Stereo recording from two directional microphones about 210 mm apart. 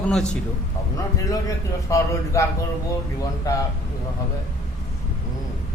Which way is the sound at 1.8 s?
15° left (ahead or behind).